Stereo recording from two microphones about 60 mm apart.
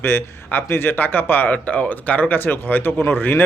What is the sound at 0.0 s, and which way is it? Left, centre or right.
Speech, left.